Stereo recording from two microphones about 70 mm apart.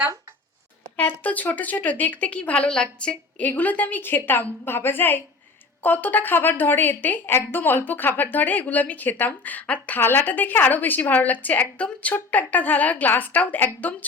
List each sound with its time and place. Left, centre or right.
0.9 s a woman's voice: left